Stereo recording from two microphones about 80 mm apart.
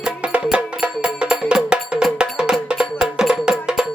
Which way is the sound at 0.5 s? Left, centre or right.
Centre.